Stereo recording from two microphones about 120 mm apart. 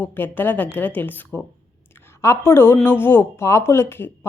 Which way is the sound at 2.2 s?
20° left (ahead or behind).